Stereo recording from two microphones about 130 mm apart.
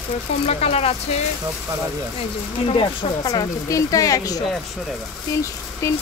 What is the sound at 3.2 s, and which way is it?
Speech, 30° left (ahead or behind).